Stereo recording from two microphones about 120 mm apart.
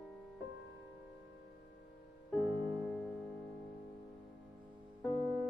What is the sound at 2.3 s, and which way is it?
Music, 10° left (ahead or behind).